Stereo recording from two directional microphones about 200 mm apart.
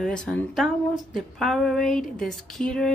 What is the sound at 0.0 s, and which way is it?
Speech, 5° left (ahead or behind).